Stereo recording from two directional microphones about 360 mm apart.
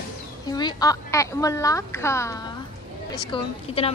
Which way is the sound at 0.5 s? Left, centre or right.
Centre.